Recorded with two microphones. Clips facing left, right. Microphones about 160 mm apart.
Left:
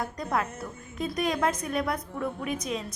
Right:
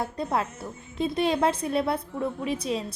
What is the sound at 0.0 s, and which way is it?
A woman's voice, 30° right (ahead or behind).